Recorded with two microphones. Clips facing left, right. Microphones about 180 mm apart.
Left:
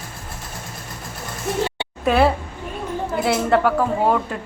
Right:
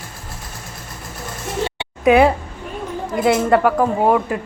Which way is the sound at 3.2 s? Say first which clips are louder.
Right 4 dB; centre (ahead or behind).